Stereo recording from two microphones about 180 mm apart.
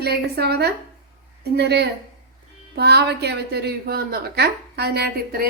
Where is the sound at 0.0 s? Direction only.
65° right (ahead or behind).